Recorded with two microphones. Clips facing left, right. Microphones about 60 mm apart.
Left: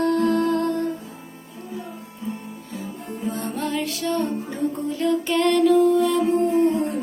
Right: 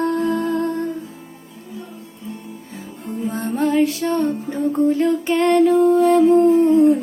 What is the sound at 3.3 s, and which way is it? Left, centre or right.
Music, right.